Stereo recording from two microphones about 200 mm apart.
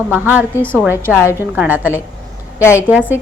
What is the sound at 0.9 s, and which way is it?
A woman's voice, 10° right (ahead or behind).